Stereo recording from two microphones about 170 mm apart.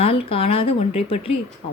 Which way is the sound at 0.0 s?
35° left (ahead or behind).